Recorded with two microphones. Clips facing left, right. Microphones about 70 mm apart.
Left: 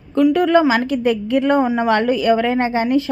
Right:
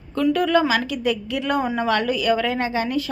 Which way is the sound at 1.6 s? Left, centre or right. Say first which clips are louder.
Left 5 dB; centre.